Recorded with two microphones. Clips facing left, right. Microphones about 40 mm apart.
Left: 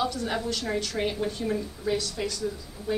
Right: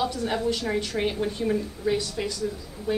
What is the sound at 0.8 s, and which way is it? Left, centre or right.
A woman's voice, centre.